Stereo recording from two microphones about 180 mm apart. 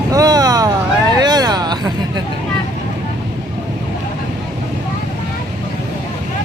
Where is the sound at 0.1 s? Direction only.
20° right (ahead or behind).